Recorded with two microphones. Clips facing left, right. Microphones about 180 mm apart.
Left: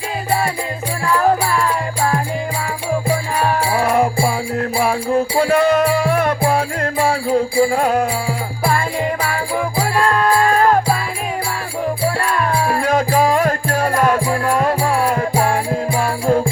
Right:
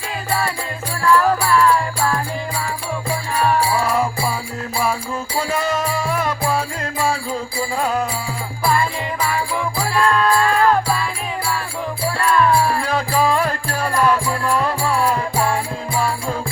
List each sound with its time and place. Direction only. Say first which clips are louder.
0.3 s music: left 3 dB; 30° left (ahead or behind)
3.4 s music: right 1 dB; 55° left (ahead or behind)
9.3 s music: left 2 dB; 40° left (ahead or behind)
12.2 s music: right 2 dB; 40° left (ahead or behind)